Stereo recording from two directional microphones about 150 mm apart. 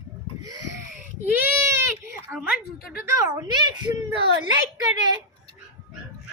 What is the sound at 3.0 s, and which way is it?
Speech, 25° right (ahead or behind).